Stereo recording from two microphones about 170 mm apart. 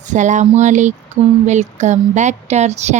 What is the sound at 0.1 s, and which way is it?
Speech, 45° right (ahead or behind).